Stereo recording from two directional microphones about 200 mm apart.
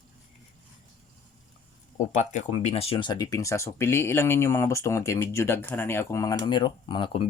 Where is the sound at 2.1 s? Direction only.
35° left (ahead or behind).